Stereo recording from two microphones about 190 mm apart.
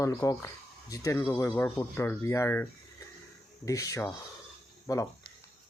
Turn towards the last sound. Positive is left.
turn(degrees=20)  # may be behind; listen again after turning